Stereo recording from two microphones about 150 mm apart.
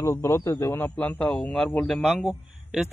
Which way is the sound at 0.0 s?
20° left (ahead or behind).